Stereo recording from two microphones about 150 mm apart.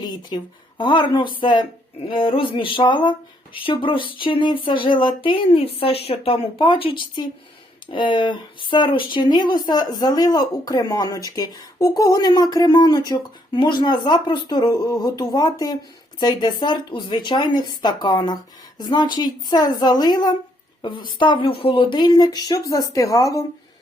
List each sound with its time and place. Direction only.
0.0 s a woman's voice: 25° left (ahead or behind)